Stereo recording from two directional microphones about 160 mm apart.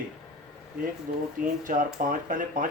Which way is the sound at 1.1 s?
60° right (ahead or behind).